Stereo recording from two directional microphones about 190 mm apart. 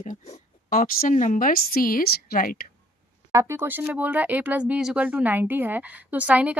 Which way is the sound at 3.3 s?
15° right (ahead or behind).